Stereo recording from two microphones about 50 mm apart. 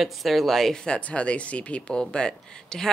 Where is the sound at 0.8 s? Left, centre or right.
Left.